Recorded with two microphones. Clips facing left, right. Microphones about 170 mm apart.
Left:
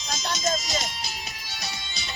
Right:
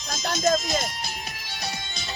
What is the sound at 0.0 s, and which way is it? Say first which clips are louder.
Music: right 4 dB; 55° right (ahead or behind).